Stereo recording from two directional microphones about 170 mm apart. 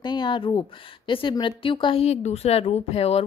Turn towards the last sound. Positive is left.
turn(degrees=35)  # may be behind; listen again after turning